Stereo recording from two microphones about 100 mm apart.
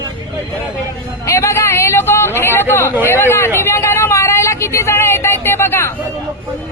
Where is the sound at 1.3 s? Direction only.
30° left (ahead or behind).